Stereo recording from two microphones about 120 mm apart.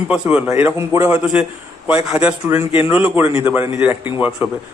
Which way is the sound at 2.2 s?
15° right (ahead or behind).